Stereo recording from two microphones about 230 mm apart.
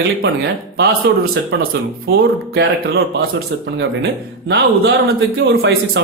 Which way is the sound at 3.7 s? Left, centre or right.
Right.